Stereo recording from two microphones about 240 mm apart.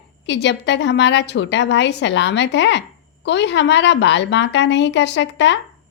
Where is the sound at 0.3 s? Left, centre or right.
Left.